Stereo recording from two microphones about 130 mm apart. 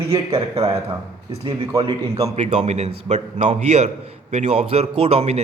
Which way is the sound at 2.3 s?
55° right (ahead or behind).